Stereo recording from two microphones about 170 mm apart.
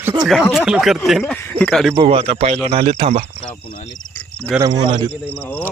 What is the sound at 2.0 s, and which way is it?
A man's voice, 35° right (ahead or behind).